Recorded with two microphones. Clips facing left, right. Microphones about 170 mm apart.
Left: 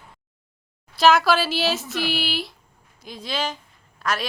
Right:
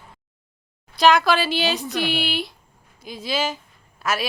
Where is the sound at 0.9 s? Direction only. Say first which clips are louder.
Even; centre (ahead or behind).